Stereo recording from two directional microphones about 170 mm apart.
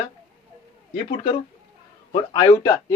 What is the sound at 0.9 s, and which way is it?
Speech, 35° left (ahead or behind).